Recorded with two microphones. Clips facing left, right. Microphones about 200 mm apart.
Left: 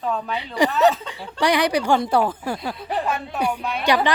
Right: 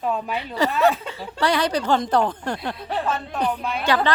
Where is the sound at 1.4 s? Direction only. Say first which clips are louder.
Left 2 dB; 15° left (ahead or behind).